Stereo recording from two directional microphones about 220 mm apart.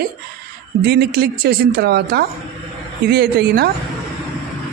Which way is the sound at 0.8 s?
45° right (ahead or behind).